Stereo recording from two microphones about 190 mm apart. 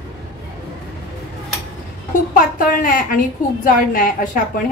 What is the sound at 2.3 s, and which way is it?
A woman's voice, 45° left (ahead or behind).